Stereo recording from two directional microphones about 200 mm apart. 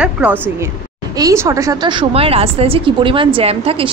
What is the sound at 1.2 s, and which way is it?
A woman's voice, 15° right (ahead or behind).